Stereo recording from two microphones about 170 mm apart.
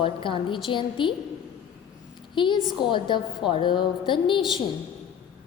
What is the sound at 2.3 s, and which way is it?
A woman's voice, 30° left (ahead or behind).